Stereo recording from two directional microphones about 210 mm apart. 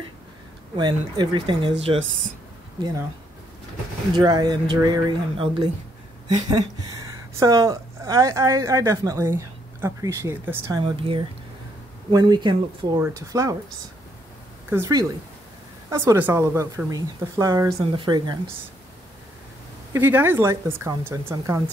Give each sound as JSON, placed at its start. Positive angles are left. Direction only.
{"t": 0.7, "sound": "speech", "side_deg": -20}
{"t": 4.2, "sound": "a woman's voice", "side_deg": -20}
{"t": 10.8, "sound": "a woman's voice", "side_deg": -25}
{"t": 14.7, "sound": "a woman's voice", "side_deg": -15}
{"t": 19.9, "sound": "a woman's voice", "side_deg": -10}